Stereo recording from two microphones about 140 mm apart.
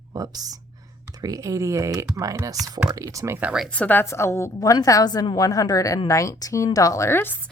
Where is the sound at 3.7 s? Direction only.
10° left (ahead or behind).